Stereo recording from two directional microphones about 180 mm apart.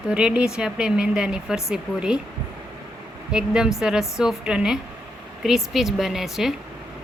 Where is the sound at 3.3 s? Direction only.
5° right (ahead or behind).